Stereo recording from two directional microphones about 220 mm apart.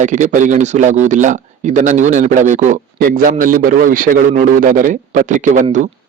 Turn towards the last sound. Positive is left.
turn(degrees=-35)  # may be behind; listen again after turning